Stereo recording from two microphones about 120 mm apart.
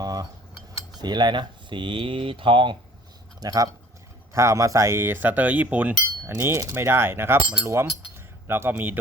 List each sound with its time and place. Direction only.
0.0 s cutlery: 30° right (ahead or behind)
0.9 s speech: 35° right (ahead or behind)
3.4 s speech: 35° right (ahead or behind)
4.4 s a sound: 25° right (ahead or behind)
8.4 s speech: 20° right (ahead or behind)